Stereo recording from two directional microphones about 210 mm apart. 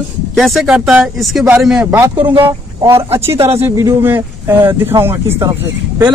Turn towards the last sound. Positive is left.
turn(degrees=-10)  # may be behind; listen again after turning